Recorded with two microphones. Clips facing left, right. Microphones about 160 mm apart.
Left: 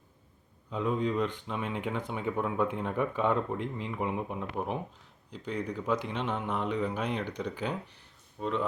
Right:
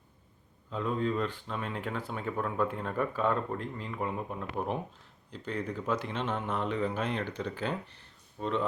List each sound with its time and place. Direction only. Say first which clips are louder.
0.9 s speech: left 1 dB; 15° left (ahead or behind)